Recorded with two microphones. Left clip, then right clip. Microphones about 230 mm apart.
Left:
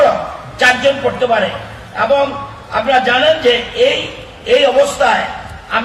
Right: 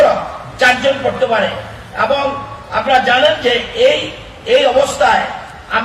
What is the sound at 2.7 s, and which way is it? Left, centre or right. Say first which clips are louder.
A man's voice: even; left.